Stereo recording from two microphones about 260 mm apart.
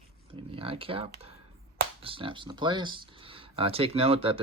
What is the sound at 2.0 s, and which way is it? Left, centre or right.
Speech, centre.